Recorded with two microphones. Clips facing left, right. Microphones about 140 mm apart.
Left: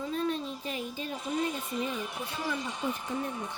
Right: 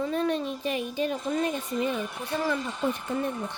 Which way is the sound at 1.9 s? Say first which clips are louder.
Right 6 dB; 75° right (ahead or behind).